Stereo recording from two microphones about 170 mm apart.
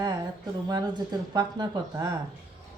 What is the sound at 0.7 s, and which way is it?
A woman's voice, 25° right (ahead or behind).